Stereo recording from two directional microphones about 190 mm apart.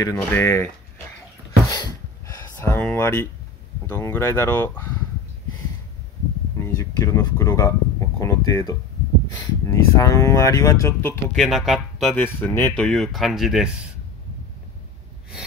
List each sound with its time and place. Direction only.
0.0 s speech: 15° left (ahead or behind)
1.7 s a sound: 20° left (ahead or behind)
3.9 s speech: 15° left (ahead or behind)
6.6 s speech: 15° left (ahead or behind)
11.3 s speech: centre (ahead or behind)